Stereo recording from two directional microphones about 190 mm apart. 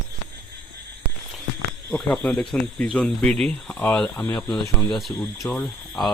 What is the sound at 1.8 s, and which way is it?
Speech, 10° left (ahead or behind).